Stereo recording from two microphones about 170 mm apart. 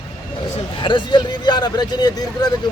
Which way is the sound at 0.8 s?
25° left (ahead or behind).